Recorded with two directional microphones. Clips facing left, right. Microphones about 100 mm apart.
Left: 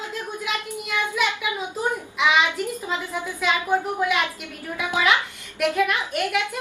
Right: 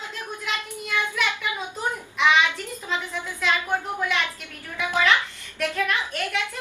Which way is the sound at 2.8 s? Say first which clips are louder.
Left 2 dB; 10° left (ahead or behind).